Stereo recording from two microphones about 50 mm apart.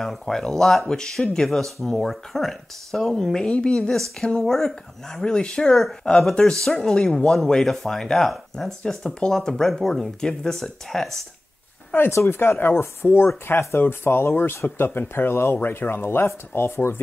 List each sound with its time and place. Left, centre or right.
0.0 s speech: centre
3.9 s speech: centre
5.2 s speech: centre
7.0 s speech: centre
12.1 s speech: left